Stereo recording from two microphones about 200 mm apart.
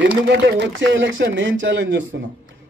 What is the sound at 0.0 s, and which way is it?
A man's voice, 65° right (ahead or behind).